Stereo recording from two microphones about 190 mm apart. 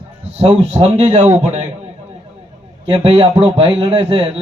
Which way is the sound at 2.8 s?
30° right (ahead or behind).